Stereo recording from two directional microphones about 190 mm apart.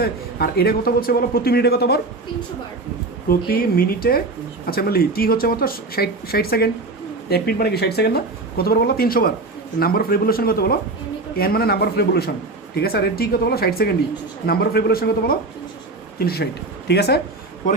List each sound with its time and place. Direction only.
0.0 s speech: 55° left (ahead or behind)
3.2 s speech: 50° left (ahead or behind)